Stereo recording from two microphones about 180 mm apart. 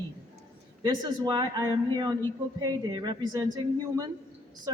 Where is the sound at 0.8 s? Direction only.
25° right (ahead or behind).